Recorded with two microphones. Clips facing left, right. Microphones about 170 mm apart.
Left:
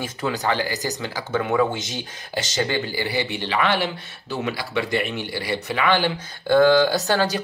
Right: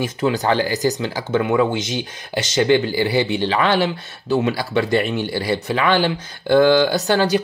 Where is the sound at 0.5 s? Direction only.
25° right (ahead or behind).